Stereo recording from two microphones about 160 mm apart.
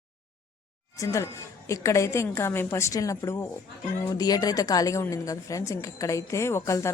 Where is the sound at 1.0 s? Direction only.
20° left (ahead or behind).